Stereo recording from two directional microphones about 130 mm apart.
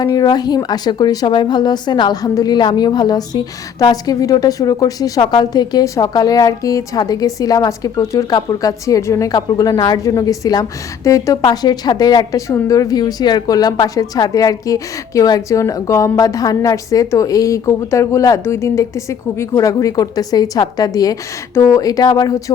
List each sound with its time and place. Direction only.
0.0 s a woman's voice: 30° left (ahead or behind)